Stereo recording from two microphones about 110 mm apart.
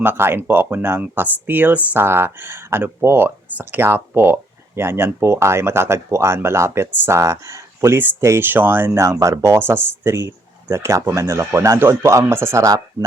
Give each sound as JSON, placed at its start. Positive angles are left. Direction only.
{"t": 0.0, "sound": "speech", "side_deg": -20}